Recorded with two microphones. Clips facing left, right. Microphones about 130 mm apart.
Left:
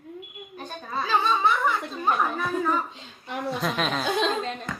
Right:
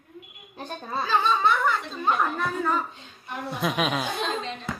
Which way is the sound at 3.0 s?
90° left.